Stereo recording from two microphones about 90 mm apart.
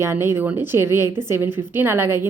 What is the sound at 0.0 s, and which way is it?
A woman's voice, 30° right (ahead or behind).